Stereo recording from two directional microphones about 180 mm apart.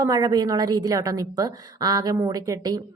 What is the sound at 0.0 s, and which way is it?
A woman's voice, 20° right (ahead or behind).